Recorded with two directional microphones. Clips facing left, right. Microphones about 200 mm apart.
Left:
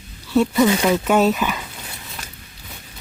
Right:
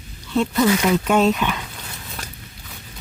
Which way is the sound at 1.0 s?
5° left (ahead or behind).